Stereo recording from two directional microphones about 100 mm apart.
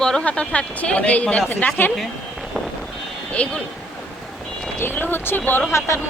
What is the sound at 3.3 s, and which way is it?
Speech, 10° left (ahead or behind).